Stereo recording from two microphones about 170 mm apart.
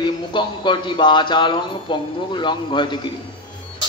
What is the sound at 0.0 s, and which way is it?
Speech, 30° left (ahead or behind).